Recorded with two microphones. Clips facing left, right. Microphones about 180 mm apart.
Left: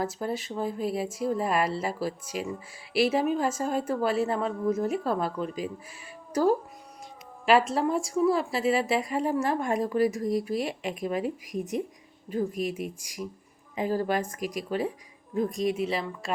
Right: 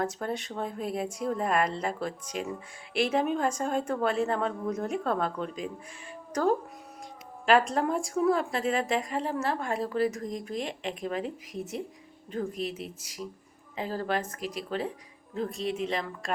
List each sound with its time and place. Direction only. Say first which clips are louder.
0.0 s a woman's voice: left 1 dB; 5° left (ahead or behind)